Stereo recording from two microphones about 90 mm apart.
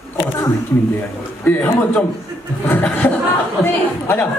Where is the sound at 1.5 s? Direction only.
20° left (ahead or behind).